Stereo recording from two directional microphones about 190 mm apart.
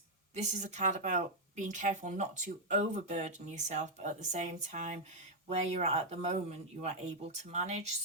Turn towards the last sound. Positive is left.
turn(degrees=-35)  # may be behind; listen again after turning